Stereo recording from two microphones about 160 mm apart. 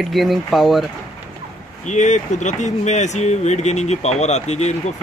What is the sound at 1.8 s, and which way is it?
Speech, 50° left (ahead or behind).